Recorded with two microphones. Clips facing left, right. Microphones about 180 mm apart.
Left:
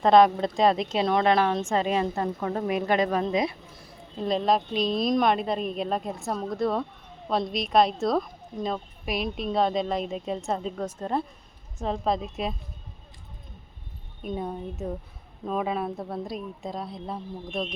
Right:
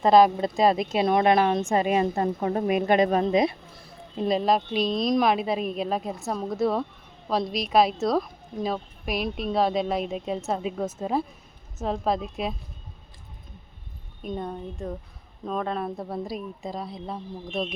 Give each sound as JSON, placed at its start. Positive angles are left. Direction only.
{"t": 0.0, "sound": "a woman's voice", "side_deg": -5}
{"t": 4.3, "sound": "a woman's voice", "side_deg": -5}
{"t": 14.2, "sound": "a woman's voice", "side_deg": 5}